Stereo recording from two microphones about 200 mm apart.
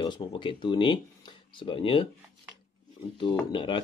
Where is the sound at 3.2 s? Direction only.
25° left (ahead or behind).